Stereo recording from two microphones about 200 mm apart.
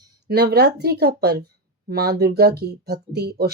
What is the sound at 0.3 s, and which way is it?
Speech, 50° right (ahead or behind).